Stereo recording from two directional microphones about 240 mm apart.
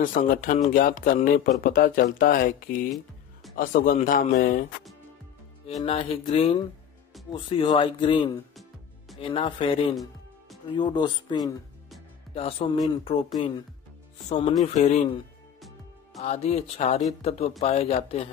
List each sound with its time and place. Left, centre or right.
0.0 s speech: left
5.8 s speech: left
14.6 s speech: left
16.2 s speech: left